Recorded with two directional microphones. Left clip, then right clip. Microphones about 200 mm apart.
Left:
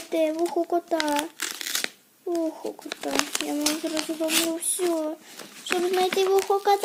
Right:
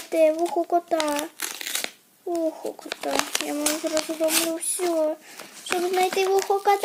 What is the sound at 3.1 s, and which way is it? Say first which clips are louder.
Speech: right 1 dB; 20° left (ahead or behind).